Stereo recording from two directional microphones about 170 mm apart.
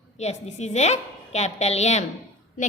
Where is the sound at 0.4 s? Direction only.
40° left (ahead or behind).